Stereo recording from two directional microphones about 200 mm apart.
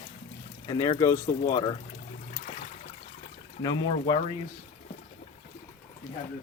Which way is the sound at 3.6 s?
20° left (ahead or behind).